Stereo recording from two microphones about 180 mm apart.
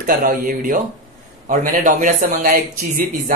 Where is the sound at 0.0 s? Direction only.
50° right (ahead or behind).